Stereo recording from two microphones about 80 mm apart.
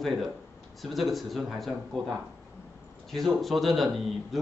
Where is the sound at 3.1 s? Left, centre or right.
Centre.